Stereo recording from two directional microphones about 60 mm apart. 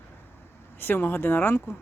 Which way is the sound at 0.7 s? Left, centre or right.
Left.